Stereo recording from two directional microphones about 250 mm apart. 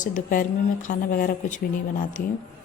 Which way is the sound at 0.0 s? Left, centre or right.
Left.